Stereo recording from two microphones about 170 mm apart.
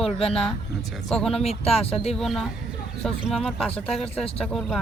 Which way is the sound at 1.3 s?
35° left (ahead or behind).